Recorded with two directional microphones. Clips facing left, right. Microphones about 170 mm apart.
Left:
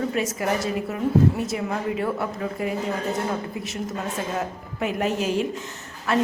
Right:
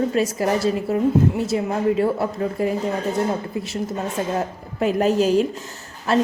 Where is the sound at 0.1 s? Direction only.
35° right (ahead or behind).